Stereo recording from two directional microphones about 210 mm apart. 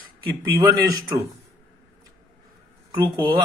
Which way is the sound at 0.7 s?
15° right (ahead or behind).